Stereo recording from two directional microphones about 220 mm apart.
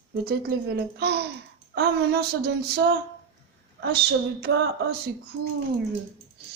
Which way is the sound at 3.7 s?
45° right (ahead or behind).